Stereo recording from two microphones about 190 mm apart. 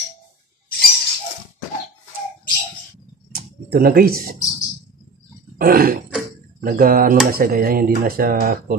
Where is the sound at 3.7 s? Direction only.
50° right (ahead or behind).